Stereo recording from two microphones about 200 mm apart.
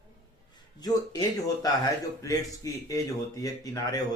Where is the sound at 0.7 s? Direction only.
20° left (ahead or behind).